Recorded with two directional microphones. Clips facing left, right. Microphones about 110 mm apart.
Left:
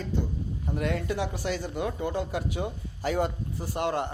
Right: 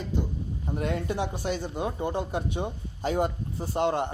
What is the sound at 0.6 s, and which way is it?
Speech, 25° right (ahead or behind).